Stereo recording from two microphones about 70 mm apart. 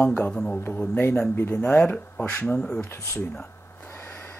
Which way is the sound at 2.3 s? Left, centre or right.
Left.